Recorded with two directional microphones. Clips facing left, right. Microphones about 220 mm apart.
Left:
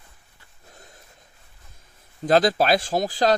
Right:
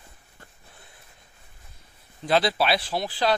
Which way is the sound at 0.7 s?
40° left (ahead or behind).